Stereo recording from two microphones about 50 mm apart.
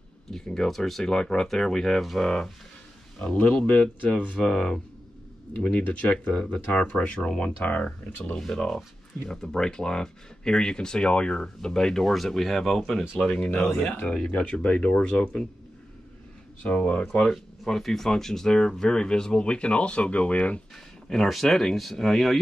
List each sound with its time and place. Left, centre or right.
0.6 s speech: centre
3.3 s speech: left
4.4 s speech: centre
5.6 s speech: left
8.4 s speech: centre
13.2 s speech: left
16.6 s speech: left
17.3 s speech: centre; by 20.6 s left
21.1 s speech: centre